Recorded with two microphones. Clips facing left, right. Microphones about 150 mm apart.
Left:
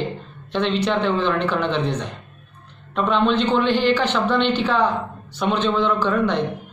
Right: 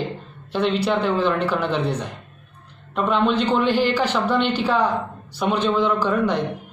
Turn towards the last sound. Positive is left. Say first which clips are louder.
# even
turn(degrees=-10)  # may be behind; listen again after turning